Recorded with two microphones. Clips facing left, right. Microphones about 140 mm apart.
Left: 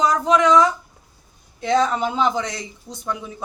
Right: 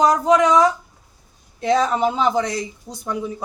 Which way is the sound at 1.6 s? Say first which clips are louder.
Right 1 dB; 5° right (ahead or behind).